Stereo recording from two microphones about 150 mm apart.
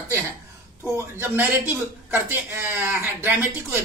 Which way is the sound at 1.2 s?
15° right (ahead or behind).